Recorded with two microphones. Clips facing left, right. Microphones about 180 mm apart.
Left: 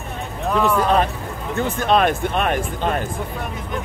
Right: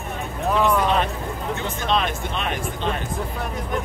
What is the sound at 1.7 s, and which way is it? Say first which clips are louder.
Speech: left 7 dB; 50° left (ahead or behind).